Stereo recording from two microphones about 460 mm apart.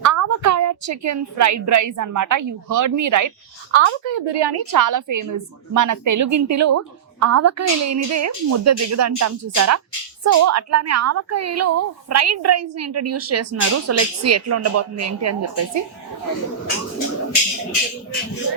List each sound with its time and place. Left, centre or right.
0.0 s a woman's voice: right
3.7 s a woman's voice: right